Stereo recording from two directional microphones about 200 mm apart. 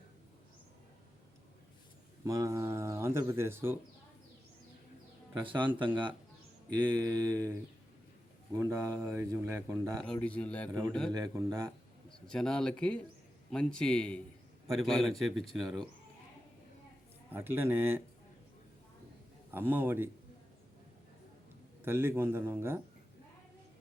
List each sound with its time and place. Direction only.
2.2 s speech: 15° right (ahead or behind)
5.5 s speech: 25° right (ahead or behind)
6.9 s speech: 20° right (ahead or behind)
8.5 s speech: 15° right (ahead or behind)
10.0 s a man's voice: 5° left (ahead or behind)
11.1 s speech: 20° right (ahead or behind)
12.3 s a man's voice: 5° left (ahead or behind)
17.3 s speech: 10° right (ahead or behind)
19.5 s speech: 10° right (ahead or behind)
21.8 s speech: 10° right (ahead or behind)